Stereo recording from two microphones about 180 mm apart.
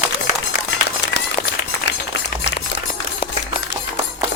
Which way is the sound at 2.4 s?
70° left (ahead or behind).